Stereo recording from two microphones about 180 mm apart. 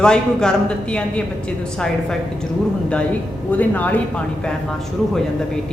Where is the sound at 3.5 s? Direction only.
10° left (ahead or behind).